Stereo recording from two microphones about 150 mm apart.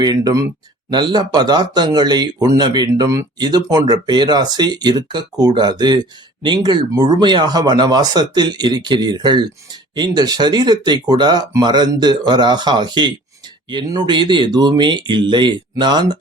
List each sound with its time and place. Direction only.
0.0 s speech: 25° right (ahead or behind)